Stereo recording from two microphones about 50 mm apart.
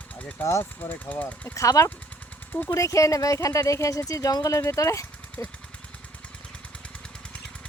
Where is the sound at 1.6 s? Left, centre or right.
Left.